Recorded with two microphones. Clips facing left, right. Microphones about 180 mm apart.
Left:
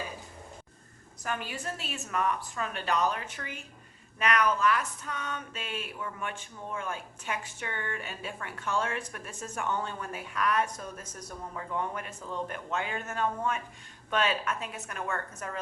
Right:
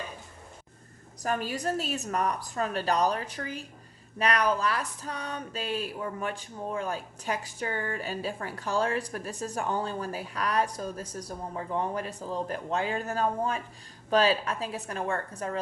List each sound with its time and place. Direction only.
1.2 s speech: 40° right (ahead or behind)